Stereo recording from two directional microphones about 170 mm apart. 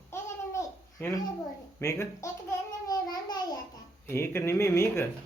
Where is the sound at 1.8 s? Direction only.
15° left (ahead or behind).